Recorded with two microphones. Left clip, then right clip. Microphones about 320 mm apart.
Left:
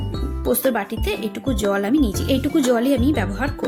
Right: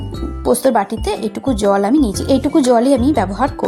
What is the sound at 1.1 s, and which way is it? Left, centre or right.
Speech, left.